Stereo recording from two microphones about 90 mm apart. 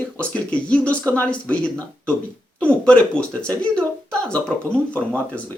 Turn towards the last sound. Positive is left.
turn(degrees=15)  # may be behind; listen again after turning